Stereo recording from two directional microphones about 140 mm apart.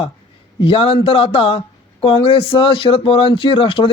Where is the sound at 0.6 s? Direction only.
40° left (ahead or behind).